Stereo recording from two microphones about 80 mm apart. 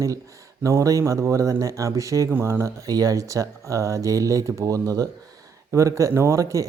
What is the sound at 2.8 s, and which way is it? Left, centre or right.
A man's voice, right.